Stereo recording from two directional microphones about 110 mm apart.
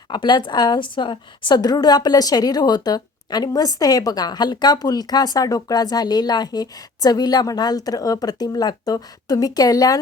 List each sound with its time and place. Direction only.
0.1 s a woman's voice: 45° left (ahead or behind)